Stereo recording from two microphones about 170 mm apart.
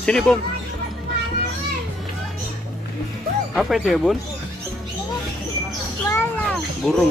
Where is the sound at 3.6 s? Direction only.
Centre (ahead or behind).